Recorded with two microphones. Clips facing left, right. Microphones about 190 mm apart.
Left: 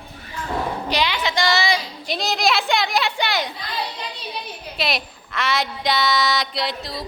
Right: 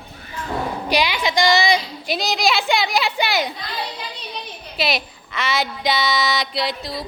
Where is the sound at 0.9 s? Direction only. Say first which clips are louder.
Right 4 dB; 10° right (ahead or behind).